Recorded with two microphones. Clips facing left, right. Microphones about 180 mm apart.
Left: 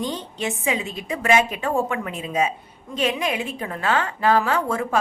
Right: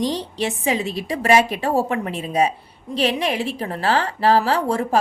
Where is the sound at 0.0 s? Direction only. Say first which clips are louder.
Right 4 dB; 35° right (ahead or behind).